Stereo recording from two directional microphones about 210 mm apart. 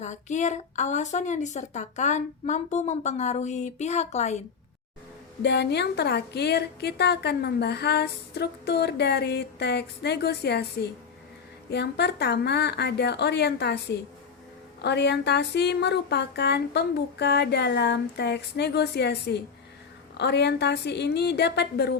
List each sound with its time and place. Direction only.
0.0 s a woman's voice: 35° left (ahead or behind)
5.4 s a woman's voice: 55° left (ahead or behind)